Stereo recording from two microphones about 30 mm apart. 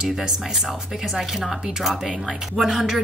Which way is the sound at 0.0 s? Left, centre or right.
Right.